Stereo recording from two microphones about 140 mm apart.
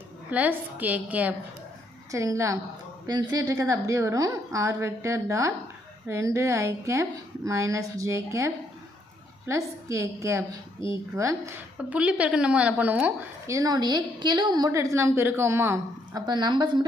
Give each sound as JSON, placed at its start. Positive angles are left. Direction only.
{"t": 0.3, "sound": "a woman's voice", "side_deg": -10}
{"t": 2.1, "sound": "a woman's voice", "side_deg": -20}
{"t": 11.8, "sound": "a woman's voice", "side_deg": -10}
{"t": 13.5, "sound": "a woman's voice", "side_deg": -25}
{"t": 16.2, "sound": "a woman's voice", "side_deg": -30}